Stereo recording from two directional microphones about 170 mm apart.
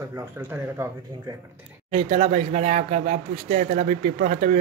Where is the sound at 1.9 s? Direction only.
40° right (ahead or behind).